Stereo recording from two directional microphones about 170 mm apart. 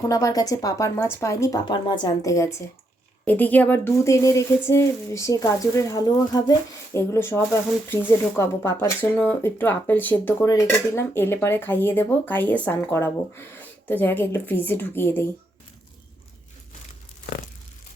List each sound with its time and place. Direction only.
0.1 s speech: 20° left (ahead or behind)